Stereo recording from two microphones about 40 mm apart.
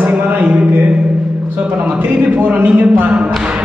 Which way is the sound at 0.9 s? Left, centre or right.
Right.